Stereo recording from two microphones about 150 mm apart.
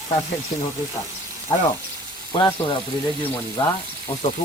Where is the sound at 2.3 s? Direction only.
35° left (ahead or behind).